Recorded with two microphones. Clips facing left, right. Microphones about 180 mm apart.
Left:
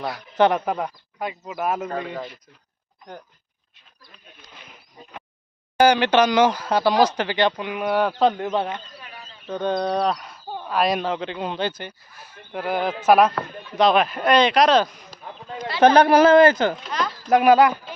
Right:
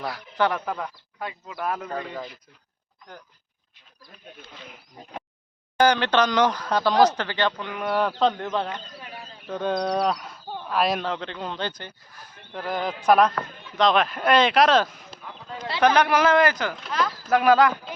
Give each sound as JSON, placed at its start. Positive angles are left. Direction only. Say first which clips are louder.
{"t": 0.0, "sound": "speech", "louder": "left 5 dB", "side_deg": 20}
{"t": 2.0, "sound": "speech", "louder": "left 3 dB", "side_deg": 10}
{"t": 5.7, "sound": "speech", "louder": "left 3 dB", "side_deg": 10}
{"t": 9.5, "sound": "speech", "louder": "left 2 dB", "side_deg": 0}
{"t": 15.8, "sound": "speech", "louder": "left 6 dB", "side_deg": 35}
{"t": 17.2, "sound": "speech", "louder": "left 3 dB", "side_deg": 15}